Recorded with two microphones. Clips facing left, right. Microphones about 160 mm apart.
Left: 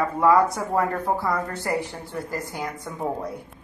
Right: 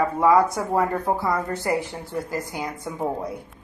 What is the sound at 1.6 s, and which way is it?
A woman's voice, 20° right (ahead or behind).